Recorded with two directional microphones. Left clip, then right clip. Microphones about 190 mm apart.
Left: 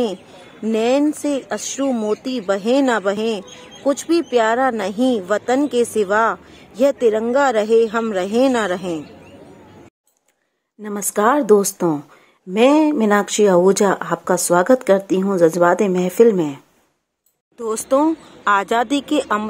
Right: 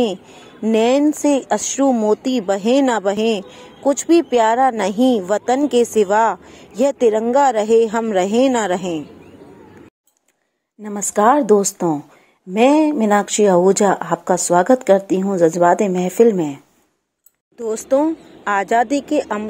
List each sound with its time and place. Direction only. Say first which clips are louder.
0.7 s a man's voice: right 2 dB; 15° right (ahead or behind)
10.8 s speech: right 2 dB; centre (ahead or behind)